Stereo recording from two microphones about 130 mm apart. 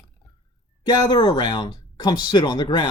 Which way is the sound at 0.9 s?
35° left (ahead or behind).